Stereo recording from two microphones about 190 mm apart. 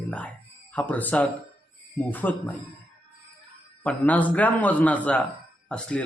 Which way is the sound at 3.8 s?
10° left (ahead or behind).